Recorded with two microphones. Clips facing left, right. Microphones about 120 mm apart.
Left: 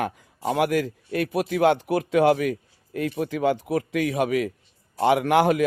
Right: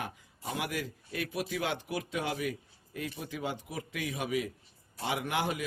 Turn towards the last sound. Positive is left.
turn(degrees=65)  # may be behind; listen again after turning